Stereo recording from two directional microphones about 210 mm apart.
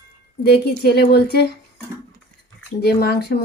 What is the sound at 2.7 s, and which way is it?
Speech, 50° left (ahead or behind).